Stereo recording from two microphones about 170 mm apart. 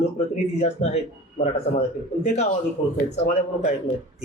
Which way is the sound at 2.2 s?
40° left (ahead or behind).